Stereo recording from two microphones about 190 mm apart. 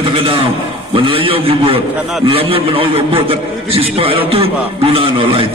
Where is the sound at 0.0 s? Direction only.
25° right (ahead or behind).